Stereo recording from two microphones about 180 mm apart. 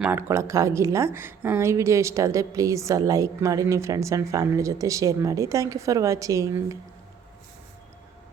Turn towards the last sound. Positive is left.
turn(degrees=-20)  # may be behind; listen again after turning